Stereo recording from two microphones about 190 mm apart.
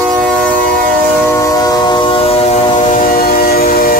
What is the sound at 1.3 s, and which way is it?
Train, 20° left (ahead or behind).